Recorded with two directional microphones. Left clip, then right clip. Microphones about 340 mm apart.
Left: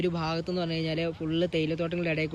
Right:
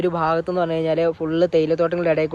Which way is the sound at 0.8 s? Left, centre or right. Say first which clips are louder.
Right 11 dB; centre.